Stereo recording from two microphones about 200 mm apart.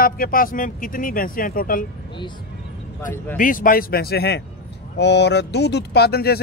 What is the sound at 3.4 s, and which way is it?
A man's voice, 40° left (ahead or behind).